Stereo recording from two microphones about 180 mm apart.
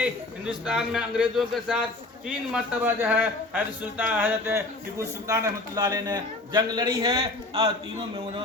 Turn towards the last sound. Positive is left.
turn(degrees=-30)  # may be behind; listen again after turning